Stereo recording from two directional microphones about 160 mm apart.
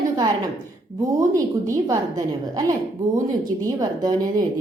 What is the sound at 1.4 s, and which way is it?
A woman's voice, 20° right (ahead or behind).